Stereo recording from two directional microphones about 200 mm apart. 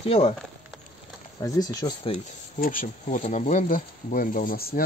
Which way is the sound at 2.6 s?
45° left (ahead or behind).